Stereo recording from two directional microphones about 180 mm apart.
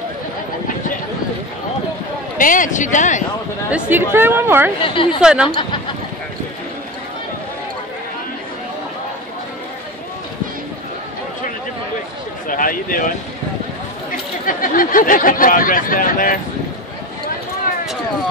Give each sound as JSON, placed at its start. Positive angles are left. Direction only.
{"t": 2.3, "sound": "speech", "side_deg": 50}
{"t": 3.9, "sound": "speech", "side_deg": -10}
{"t": 4.8, "sound": "a woman's voice", "side_deg": 30}
{"t": 5.2, "sound": "a woman's voice", "side_deg": -5}
{"t": 12.4, "sound": "a sound", "side_deg": 50}
{"t": 14.1, "sound": "speech", "side_deg": 50}